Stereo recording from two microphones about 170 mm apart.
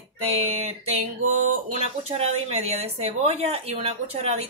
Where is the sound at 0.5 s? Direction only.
35° right (ahead or behind).